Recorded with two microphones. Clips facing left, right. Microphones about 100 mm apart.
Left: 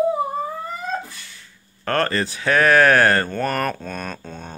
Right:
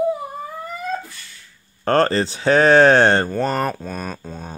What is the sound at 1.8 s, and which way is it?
Speech, 30° right (ahead or behind).